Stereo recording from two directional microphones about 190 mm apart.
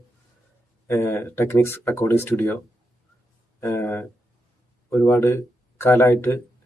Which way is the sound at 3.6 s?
15° left (ahead or behind).